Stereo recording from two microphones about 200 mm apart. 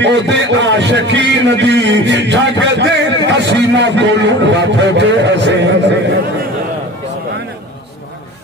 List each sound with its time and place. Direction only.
0.0 s a man's voice: 60° right (ahead or behind)